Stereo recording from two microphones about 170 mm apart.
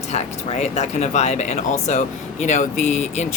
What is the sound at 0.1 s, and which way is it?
Speech, 40° left (ahead or behind).